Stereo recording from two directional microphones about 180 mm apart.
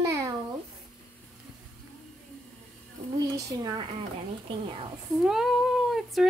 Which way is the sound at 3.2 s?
20° right (ahead or behind).